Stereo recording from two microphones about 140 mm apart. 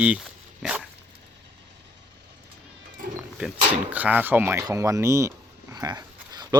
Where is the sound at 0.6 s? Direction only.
5° right (ahead or behind).